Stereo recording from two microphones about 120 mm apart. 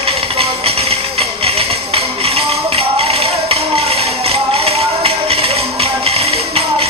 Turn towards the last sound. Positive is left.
turn(degrees=-55)  # may be behind; listen again after turning